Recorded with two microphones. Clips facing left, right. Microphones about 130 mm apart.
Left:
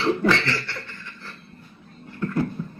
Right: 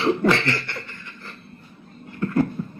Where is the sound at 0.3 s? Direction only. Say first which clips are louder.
Right 2 dB; 15° right (ahead or behind).